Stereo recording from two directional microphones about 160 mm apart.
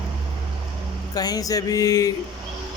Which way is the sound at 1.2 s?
25° left (ahead or behind).